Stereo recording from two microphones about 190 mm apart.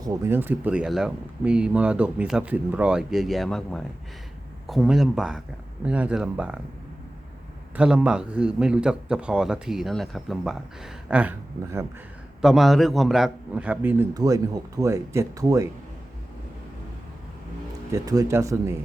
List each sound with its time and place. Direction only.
0.0 s a man's voice: 15° right (ahead or behind)
7.8 s a man's voice: 5° right (ahead or behind)
12.4 s a man's voice: centre (ahead or behind); by 15.7 s 15° right (ahead or behind)
17.9 s a man's voice: 20° right (ahead or behind)